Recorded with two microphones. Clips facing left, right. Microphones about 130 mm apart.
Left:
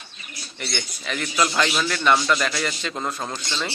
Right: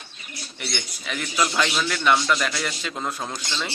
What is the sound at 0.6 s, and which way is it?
A man's voice, 5° right (ahead or behind).